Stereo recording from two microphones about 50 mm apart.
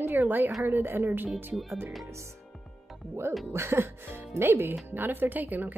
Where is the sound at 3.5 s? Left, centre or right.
Right.